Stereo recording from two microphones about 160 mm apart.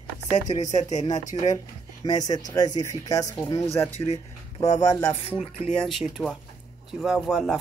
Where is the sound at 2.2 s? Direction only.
25° left (ahead or behind).